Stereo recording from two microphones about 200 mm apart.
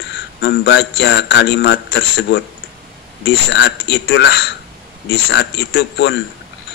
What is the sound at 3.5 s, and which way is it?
Speech, 60° left (ahead or behind).